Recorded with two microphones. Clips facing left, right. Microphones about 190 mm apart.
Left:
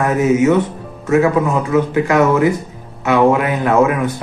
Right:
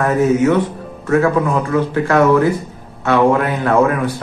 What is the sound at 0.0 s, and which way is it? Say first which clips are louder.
A man's voice: even; 15° left (ahead or behind).